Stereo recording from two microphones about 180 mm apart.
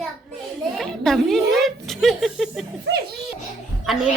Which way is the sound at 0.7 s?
Centre (ahead or behind).